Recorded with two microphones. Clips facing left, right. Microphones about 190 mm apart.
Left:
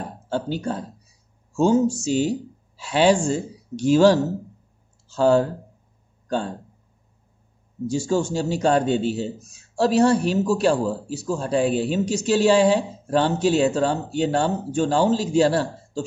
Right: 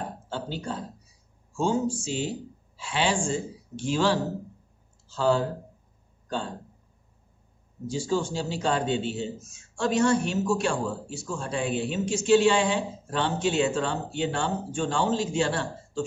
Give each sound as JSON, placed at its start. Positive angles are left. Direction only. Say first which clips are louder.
{"t": 0.3, "sound": "a sound", "louder": "left 9 dB", "side_deg": 45}
{"t": 1.6, "sound": "a man's voice", "louder": "left 7 dB", "side_deg": 40}
{"t": 7.9, "sound": "a man's voice", "louder": "left 5 dB", "side_deg": 45}